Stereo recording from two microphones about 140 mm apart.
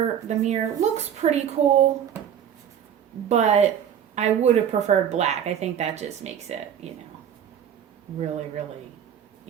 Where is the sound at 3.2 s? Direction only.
50° right (ahead or behind).